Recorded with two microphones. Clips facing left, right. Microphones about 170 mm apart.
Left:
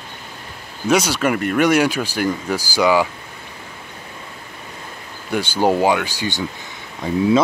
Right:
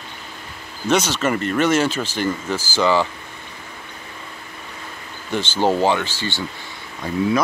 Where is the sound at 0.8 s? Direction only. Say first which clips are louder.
Left 2 dB; 10° left (ahead or behind).